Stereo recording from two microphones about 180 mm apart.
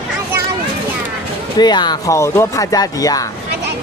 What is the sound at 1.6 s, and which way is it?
Speech, 25° left (ahead or behind).